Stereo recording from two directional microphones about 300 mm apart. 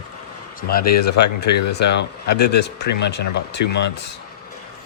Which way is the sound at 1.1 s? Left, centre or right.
Left.